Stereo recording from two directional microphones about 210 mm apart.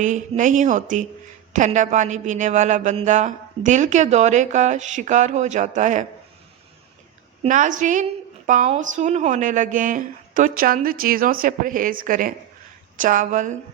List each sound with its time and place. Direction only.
0.0 s a man's voice: 35° right (ahead or behind)
7.4 s a man's voice: 35° right (ahead or behind)